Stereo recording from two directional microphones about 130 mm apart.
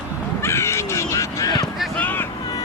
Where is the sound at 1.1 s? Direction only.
25° left (ahead or behind).